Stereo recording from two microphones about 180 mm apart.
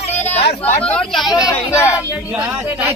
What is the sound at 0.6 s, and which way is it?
Speech, 10° left (ahead or behind).